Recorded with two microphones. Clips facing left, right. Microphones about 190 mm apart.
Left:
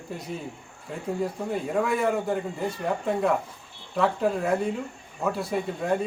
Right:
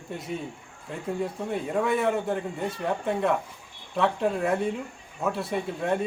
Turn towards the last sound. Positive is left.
turn(degrees=0)  # may be behind; listen again after turning